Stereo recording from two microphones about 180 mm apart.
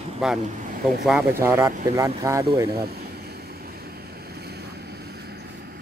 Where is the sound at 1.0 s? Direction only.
10° right (ahead or behind).